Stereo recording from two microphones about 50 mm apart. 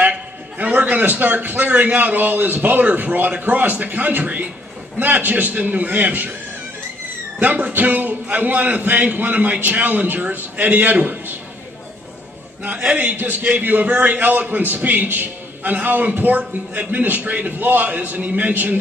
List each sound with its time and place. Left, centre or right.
0.6 s a man's voice: right
7.3 s a man's voice: right
13.0 s a man's voice: right